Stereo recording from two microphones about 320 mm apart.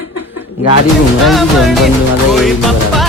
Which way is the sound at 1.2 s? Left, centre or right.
Centre.